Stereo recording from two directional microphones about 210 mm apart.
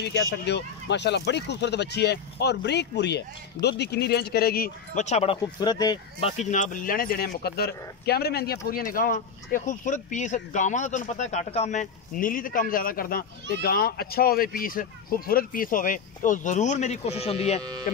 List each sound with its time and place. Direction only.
0.0 s speech: 55° left (ahead or behind); by 6.3 s 20° left (ahead or behind)
6.3 s speech: 35° left (ahead or behind)